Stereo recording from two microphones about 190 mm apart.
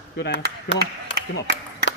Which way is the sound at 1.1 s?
60° right (ahead or behind).